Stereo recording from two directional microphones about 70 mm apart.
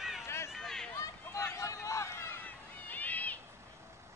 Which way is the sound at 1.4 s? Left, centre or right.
Left.